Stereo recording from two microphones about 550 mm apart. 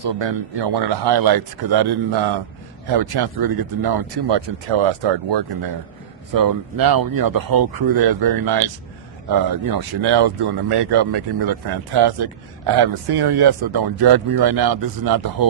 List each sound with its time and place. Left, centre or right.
0.0 s speech: right
6.3 s speech: right